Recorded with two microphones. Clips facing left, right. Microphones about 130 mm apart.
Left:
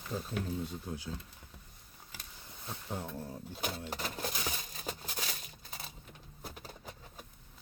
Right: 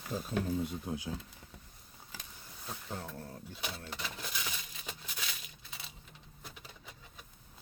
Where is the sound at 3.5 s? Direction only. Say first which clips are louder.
Left 5 dB; 45° left (ahead or behind).